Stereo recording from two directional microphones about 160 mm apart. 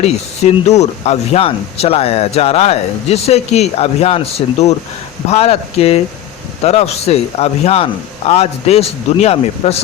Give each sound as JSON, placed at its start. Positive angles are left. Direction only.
{"t": 0.0, "sound": "speech", "side_deg": 45}